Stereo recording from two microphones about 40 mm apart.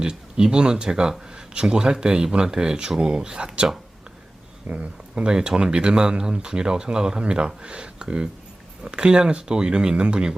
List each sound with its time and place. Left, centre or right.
0.0 s speech: right
4.7 s speech: right